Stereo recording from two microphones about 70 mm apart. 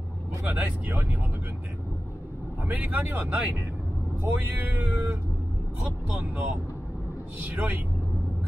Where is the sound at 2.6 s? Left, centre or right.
Right.